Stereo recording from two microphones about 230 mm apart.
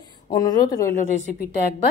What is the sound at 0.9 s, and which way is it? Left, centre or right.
Speech, left.